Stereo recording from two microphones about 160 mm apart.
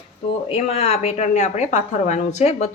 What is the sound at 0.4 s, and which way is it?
A woman's voice, 40° left (ahead or behind).